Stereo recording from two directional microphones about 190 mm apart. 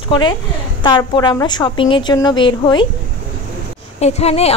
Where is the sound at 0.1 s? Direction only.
25° left (ahead or behind).